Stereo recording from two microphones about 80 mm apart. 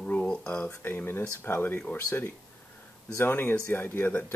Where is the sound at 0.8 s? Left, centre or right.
Left.